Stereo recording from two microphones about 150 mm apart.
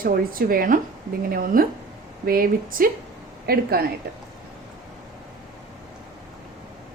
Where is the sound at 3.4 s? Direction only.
90° right.